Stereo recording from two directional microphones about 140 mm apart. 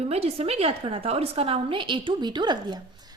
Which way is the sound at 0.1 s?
45° right (ahead or behind).